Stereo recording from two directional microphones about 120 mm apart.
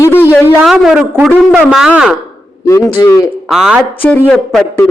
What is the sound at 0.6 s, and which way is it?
A man's voice, 5° right (ahead or behind).